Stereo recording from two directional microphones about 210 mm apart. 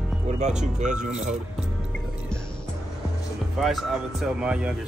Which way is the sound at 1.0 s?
35° right (ahead or behind).